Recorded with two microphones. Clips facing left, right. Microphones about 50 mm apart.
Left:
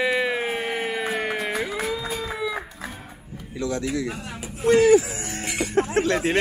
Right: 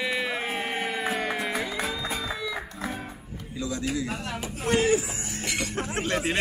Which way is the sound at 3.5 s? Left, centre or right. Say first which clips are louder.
Left 4 dB; left.